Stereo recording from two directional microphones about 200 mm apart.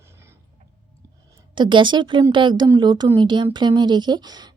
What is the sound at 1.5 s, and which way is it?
Speech, 25° right (ahead or behind).